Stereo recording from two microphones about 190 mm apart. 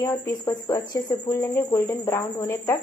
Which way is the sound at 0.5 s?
20° left (ahead or behind).